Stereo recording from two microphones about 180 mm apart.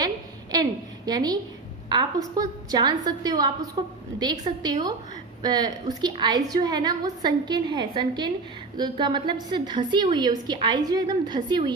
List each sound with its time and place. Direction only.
0.5 s a woman's voice: 20° right (ahead or behind)